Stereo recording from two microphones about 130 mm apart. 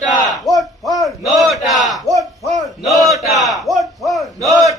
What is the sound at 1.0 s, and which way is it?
Battle cry, centre (ahead or behind).